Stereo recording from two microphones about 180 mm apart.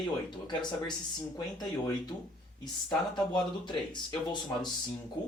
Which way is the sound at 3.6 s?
25° left (ahead or behind).